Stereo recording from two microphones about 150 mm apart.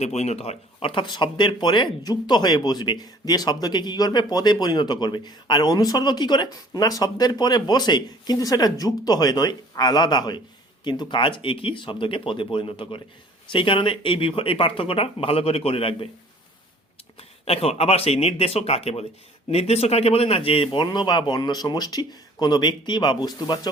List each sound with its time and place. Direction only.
0.0 s speech: 45° left (ahead or behind)
17.2 s speech: 40° left (ahead or behind)